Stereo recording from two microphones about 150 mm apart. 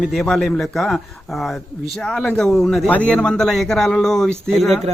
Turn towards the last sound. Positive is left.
turn(degrees=0)  # may be behind; listen again after turning